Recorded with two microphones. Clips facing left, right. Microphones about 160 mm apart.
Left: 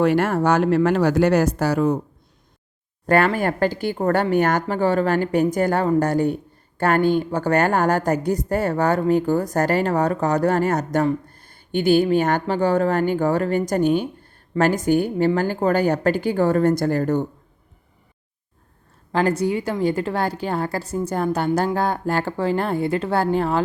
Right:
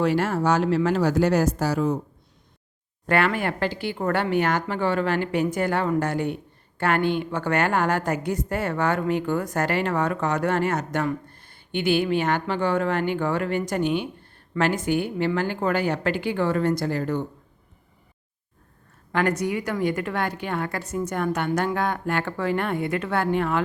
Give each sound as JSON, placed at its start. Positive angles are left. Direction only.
{"t": 0.0, "sound": "speech", "side_deg": 55}
{"t": 3.1, "sound": "a woman's voice", "side_deg": 40}
{"t": 19.1, "sound": "a woman's voice", "side_deg": 30}